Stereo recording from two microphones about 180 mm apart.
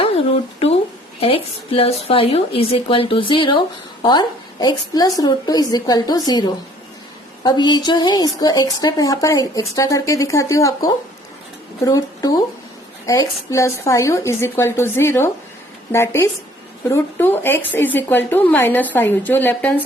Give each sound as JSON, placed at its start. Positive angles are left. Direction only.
{"t": 0.0, "sound": "a sound", "side_deg": 35}
{"t": 1.2, "sound": "a woman's voice", "side_deg": 30}
{"t": 7.4, "sound": "a woman's voice", "side_deg": 25}